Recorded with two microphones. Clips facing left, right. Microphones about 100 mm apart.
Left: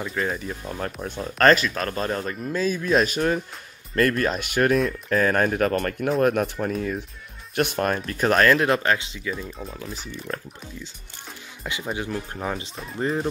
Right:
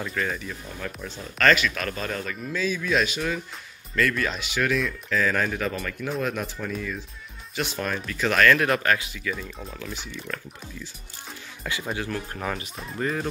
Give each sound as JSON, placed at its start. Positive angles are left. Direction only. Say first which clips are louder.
{"t": 0.2, "sound": "speech", "louder": "left 2 dB", "side_deg": 30}
{"t": 0.7, "sound": "speech", "louder": "left 5 dB", "side_deg": 50}
{"t": 1.4, "sound": "speech", "louder": "left 3 dB", "side_deg": 35}
{"t": 6.6, "sound": "speech", "louder": "left 5 dB", "side_deg": 45}
{"t": 7.5, "sound": "speech", "louder": "left 6 dB", "side_deg": 55}
{"t": 11.9, "sound": "speech", "louder": "left 3 dB", "side_deg": 20}
{"t": 12.7, "sound": "speech", "louder": "left 1 dB", "side_deg": 0}
{"t": 13.0, "sound": "speech", "louder": "left 3 dB", "side_deg": 25}